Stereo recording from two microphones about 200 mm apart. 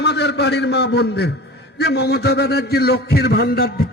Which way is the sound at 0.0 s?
60° left (ahead or behind).